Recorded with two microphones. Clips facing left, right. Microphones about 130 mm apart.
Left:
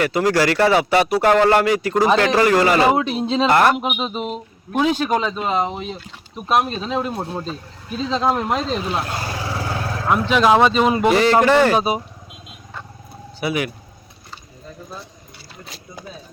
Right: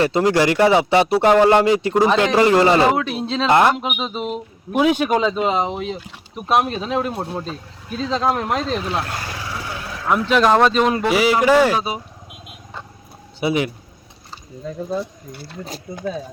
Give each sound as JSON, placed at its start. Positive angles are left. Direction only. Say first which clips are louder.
{"t": 0.0, "sound": "speech", "louder": "right 1 dB", "side_deg": -25}
{"t": 3.2, "sound": "speech", "louder": "left 3 dB", "side_deg": 5}
{"t": 3.5, "sound": "speech", "louder": "right 2 dB", "side_deg": -20}
{"t": 3.8, "sound": "speech", "louder": "left 1 dB", "side_deg": 5}
{"t": 7.3, "sound": "speech", "louder": "even", "side_deg": 0}
{"t": 9.0, "sound": "vehicle", "louder": "left 3 dB", "side_deg": 25}
{"t": 10.1, "sound": "speech", "louder": "even", "side_deg": 0}
{"t": 11.7, "sound": "speech", "louder": "left 3 dB", "side_deg": 20}
{"t": 13.4, "sound": "speech", "louder": "right 3 dB", "side_deg": -25}
{"t": 15.3, "sound": "speech", "louder": "right 8 dB", "side_deg": -45}